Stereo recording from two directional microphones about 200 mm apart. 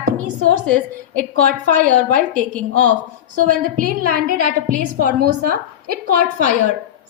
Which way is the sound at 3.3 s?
45° right (ahead or behind).